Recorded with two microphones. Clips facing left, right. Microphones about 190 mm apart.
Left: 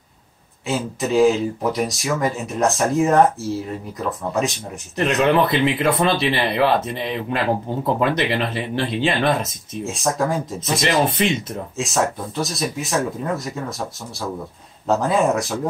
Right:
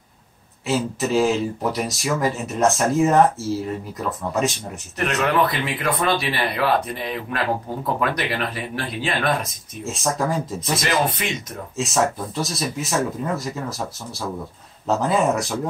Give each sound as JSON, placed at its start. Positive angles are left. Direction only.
{"t": 0.7, "sound": "speech", "side_deg": 0}
{"t": 4.9, "sound": "speech", "side_deg": 20}
{"t": 9.8, "sound": "speech", "side_deg": 0}
{"t": 10.6, "sound": "speech", "side_deg": 25}
{"t": 11.7, "sound": "speech", "side_deg": 0}
{"t": 14.9, "sound": "speech", "side_deg": 0}